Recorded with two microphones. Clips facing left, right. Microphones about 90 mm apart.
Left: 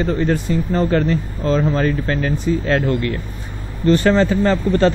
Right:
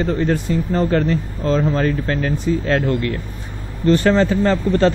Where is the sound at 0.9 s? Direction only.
5° left (ahead or behind).